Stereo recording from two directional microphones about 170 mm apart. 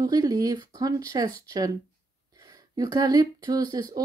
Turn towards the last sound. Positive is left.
turn(degrees=-20)  # may be behind; listen again after turning